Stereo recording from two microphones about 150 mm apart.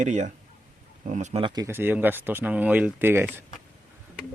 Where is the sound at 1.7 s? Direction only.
15° right (ahead or behind).